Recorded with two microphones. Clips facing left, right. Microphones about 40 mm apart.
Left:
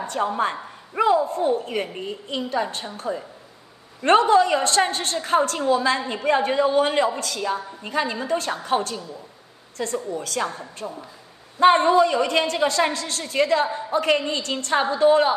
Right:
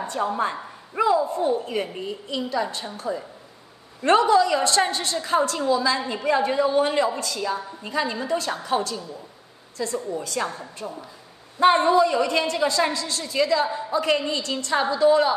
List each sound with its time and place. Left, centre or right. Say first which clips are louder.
0.2 s a woman's voice: left 1 dB; left
0.9 s a woman's voice: left 1 dB; left
4.0 s a woman's voice: left 1 dB; left
10.8 s speech: left 1 dB; centre
11.7 s a woman's voice: left 1 dB; left